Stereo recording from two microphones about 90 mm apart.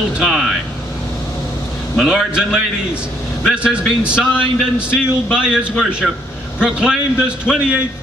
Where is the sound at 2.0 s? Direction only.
5° right (ahead or behind).